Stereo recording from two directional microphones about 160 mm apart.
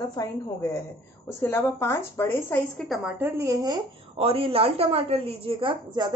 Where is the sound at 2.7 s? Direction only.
Centre (ahead or behind).